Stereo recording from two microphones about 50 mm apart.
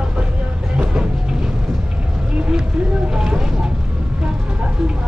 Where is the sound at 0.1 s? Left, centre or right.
Right.